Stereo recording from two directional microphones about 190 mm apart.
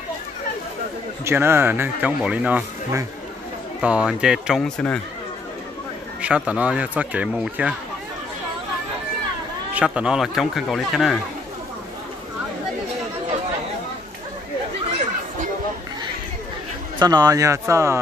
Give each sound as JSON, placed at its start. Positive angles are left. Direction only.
{"t": 1.2, "sound": "speech", "side_deg": -10}
{"t": 6.2, "sound": "speech", "side_deg": -5}
{"t": 9.8, "sound": "speech", "side_deg": -5}
{"t": 17.0, "sound": "speech", "side_deg": -20}